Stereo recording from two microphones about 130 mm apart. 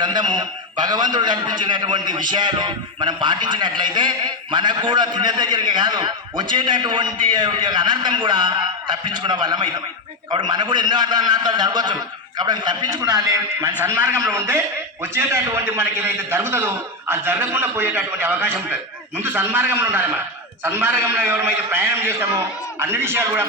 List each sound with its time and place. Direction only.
0.0 s a man's voice: 35° right (ahead or behind)
13.8 s a man's voice: 15° right (ahead or behind)